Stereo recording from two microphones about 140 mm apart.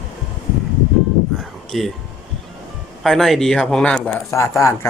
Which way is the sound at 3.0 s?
Centre (ahead or behind).